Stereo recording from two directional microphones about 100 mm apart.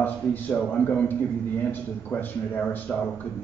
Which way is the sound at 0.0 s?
20° left (ahead or behind).